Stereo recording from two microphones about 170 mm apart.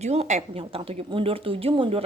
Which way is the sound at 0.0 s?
40° right (ahead or behind).